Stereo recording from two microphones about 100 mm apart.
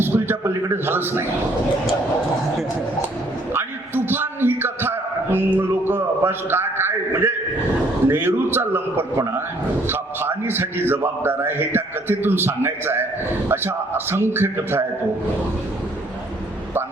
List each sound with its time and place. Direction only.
0.0 s a man's voice: 20° right (ahead or behind)
3.5 s a sound: 20° right (ahead or behind)
8.0 s a man's voice: 25° right (ahead or behind)